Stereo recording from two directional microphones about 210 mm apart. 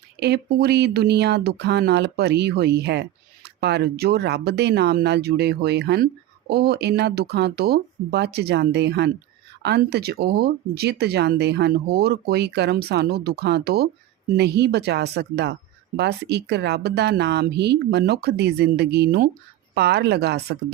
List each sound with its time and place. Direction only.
0.2 s speech: 50° right (ahead or behind)